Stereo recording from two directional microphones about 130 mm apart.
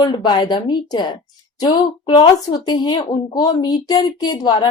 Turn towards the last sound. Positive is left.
turn(degrees=35)  # may be behind; listen again after turning